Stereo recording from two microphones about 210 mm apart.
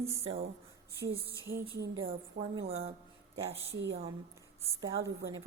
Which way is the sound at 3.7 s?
55° right (ahead or behind).